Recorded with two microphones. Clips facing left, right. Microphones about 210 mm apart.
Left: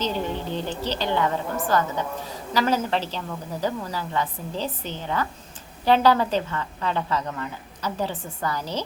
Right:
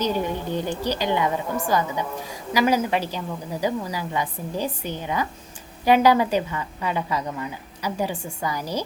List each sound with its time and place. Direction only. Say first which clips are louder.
0.0 s a woman's voice: right 2 dB; 10° right (ahead or behind)